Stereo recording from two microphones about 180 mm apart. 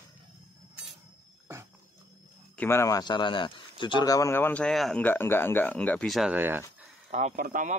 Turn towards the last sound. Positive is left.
turn(degrees=-45)  # may be behind; listen again after turning